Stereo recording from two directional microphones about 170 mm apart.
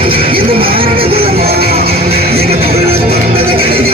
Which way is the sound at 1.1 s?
65° right (ahead or behind).